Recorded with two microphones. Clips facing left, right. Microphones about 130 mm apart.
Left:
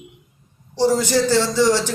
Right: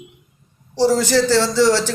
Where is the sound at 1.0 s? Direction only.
20° left (ahead or behind).